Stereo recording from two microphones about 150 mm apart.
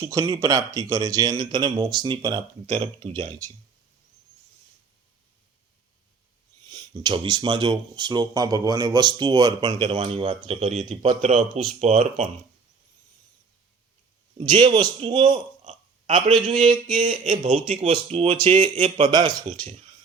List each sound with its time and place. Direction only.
0.0 s speech: 20° right (ahead or behind)
2.6 s a man's voice: 40° right (ahead or behind)
6.7 s speech: 30° right (ahead or behind); by 12.3 s 50° right (ahead or behind)
14.3 s a man's voice: 30° right (ahead or behind)
15.6 s a sound: 50° right (ahead or behind)
16.2 s a man's voice: 35° right (ahead or behind)